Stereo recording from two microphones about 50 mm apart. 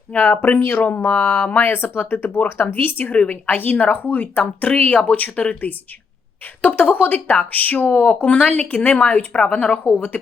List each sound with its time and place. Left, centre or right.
0.1 s speech: left
1.6 s speech: left
3.1 s speech: left